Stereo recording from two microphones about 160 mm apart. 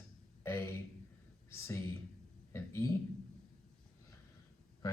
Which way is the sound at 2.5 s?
15° left (ahead or behind).